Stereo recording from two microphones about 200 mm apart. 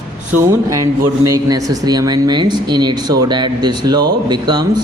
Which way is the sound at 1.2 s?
20° right (ahead or behind).